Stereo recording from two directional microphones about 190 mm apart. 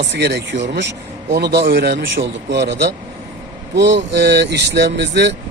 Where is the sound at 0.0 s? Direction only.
65° right (ahead or behind).